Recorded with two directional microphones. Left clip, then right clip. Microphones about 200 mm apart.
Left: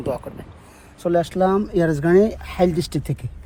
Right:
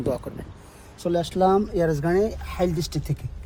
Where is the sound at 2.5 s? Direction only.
35° left (ahead or behind).